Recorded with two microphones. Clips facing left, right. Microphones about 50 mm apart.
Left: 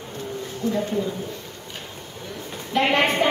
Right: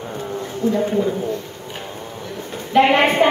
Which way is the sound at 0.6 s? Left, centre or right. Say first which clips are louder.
Right 5 dB; centre.